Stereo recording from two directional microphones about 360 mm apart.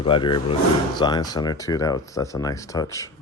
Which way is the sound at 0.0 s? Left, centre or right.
Centre.